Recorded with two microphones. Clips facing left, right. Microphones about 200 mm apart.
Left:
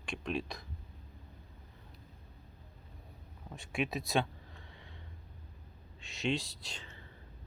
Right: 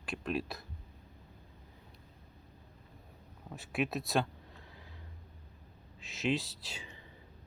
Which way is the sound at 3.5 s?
5° right (ahead or behind).